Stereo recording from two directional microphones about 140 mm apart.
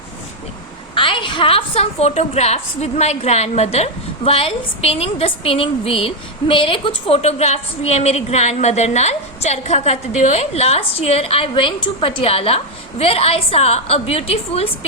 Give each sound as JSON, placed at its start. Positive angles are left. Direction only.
{"t": 0.9, "sound": "a woman's voice", "side_deg": 35}